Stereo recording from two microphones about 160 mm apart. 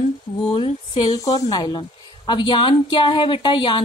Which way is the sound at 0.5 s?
35° left (ahead or behind).